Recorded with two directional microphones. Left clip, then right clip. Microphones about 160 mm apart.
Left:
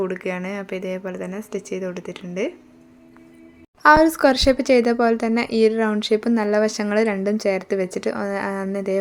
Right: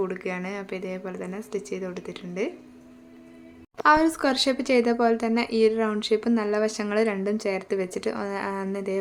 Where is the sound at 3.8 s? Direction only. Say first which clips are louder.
Left 6 dB; 30° left (ahead or behind).